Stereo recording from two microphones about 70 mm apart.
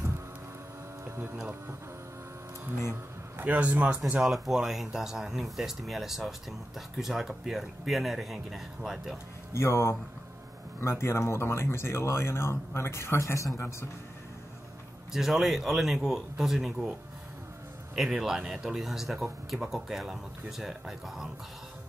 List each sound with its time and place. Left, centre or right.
1.0 s a sound: right
3.3 s a man's voice: right
4.2 s speech: centre
9.5 s speech: left
15.1 s speech: centre
17.9 s speech: centre